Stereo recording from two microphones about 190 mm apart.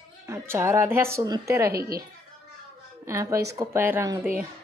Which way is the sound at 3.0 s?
15° right (ahead or behind).